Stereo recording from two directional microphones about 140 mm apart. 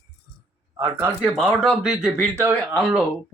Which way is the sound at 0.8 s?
15° right (ahead or behind).